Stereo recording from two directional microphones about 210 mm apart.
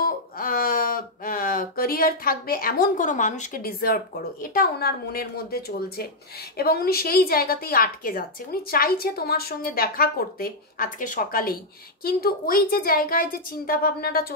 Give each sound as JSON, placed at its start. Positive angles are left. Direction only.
{"t": 0.0, "sound": "a woman's voice", "side_deg": 45}